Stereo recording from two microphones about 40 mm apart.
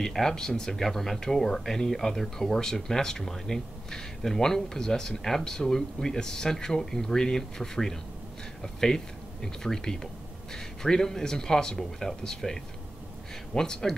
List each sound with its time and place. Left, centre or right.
0.0 s speech: centre
13.6 s speech: centre